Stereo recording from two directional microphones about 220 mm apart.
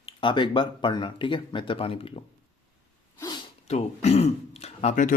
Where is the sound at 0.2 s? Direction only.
20° left (ahead or behind).